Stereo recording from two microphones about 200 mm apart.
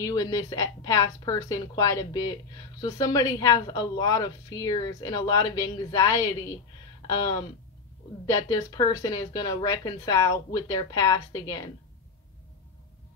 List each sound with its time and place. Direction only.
0.0 s a woman's voice: 20° left (ahead or behind)